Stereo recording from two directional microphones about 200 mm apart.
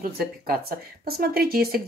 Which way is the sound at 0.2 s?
50° right (ahead or behind).